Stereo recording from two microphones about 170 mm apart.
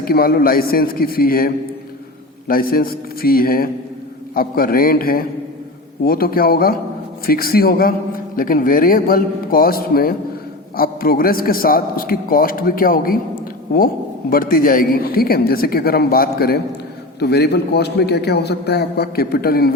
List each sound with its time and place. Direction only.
0.0 s a man's voice: 60° left (ahead or behind)
17.2 s a man's voice: 75° left (ahead or behind)